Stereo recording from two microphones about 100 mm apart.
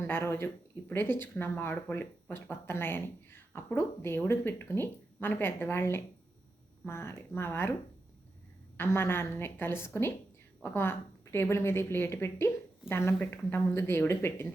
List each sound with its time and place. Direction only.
0.0 s speech: 25° left (ahead or behind)
8.8 s speech: 25° left (ahead or behind)